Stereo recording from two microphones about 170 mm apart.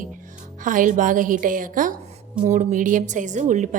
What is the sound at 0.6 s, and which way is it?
A woman's voice, 50° right (ahead or behind).